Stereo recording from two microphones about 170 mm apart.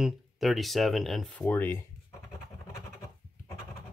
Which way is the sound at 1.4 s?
10° left (ahead or behind).